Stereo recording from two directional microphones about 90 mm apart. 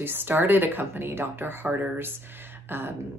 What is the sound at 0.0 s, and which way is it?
Speech, 25° right (ahead or behind).